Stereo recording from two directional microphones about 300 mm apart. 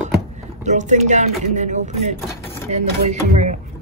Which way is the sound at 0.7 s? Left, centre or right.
Right.